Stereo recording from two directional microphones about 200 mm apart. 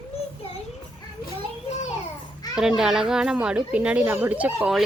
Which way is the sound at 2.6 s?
5° right (ahead or behind).